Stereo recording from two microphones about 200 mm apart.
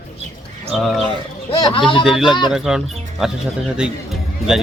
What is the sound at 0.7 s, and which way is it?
Speech, centre (ahead or behind).